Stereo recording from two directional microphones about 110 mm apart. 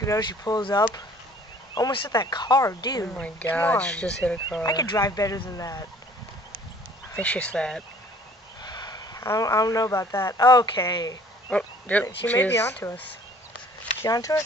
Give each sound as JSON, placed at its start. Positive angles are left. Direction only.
{"t": 0.2, "sound": "speech", "side_deg": 40}
{"t": 3.1, "sound": "speech", "side_deg": 10}
{"t": 4.6, "sound": "speech", "side_deg": 35}
{"t": 7.2, "sound": "speech", "side_deg": 10}
{"t": 8.6, "sound": "a sound", "side_deg": 40}
{"t": 9.2, "sound": "speech", "side_deg": 30}
{"t": 11.5, "sound": "speech", "side_deg": 15}
{"t": 14.0, "sound": "speech", "side_deg": 30}